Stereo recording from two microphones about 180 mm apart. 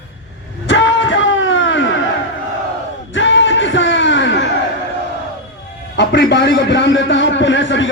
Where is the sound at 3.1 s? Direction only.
90° left.